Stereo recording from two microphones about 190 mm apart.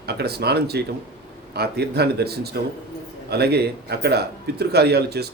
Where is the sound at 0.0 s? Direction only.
55° right (ahead or behind).